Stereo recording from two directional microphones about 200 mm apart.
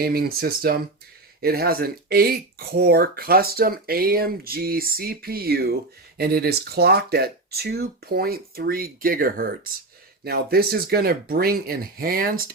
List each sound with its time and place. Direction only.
0.0 s speech: 50° right (ahead or behind)